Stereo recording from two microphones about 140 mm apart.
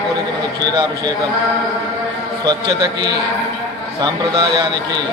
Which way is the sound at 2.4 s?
30° right (ahead or behind).